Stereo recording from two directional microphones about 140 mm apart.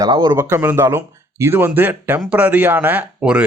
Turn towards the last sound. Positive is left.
turn(degrees=-10)  # may be behind; listen again after turning